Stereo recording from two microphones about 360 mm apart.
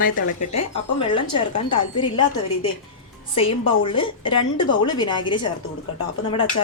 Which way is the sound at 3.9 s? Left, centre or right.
Centre.